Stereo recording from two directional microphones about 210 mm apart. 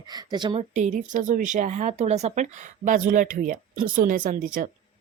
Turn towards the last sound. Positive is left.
turn(degrees=-40)  # may be behind; listen again after turning